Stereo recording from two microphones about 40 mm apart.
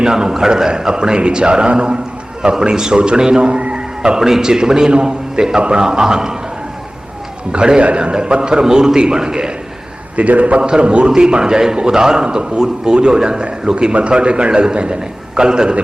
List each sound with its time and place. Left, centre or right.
0.0 s a man's voice: centre
4.2 s a man's voice: centre
7.5 s a man's voice: centre
7.8 s a man's voice: right
10.2 s a man's voice: right
10.6 s a man's voice: right